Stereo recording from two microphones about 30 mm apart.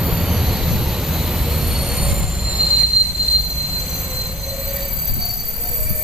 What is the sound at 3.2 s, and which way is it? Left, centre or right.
Train, right.